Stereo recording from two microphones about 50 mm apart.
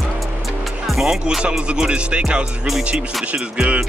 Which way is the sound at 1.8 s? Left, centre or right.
Right.